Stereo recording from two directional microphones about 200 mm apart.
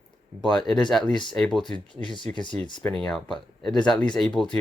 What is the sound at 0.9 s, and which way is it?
Speech, 5° left (ahead or behind).